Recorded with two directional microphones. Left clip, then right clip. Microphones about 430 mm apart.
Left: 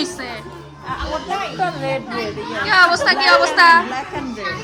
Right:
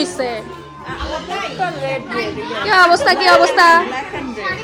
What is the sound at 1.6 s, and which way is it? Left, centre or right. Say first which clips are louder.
Speech: right 1 dB; left.